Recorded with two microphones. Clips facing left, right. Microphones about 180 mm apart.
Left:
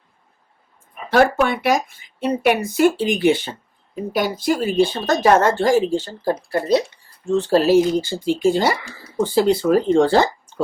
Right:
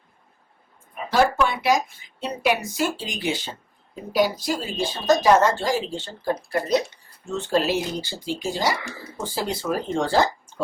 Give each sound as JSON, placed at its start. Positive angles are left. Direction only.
{"t": 1.1, "sound": "speech", "side_deg": 55}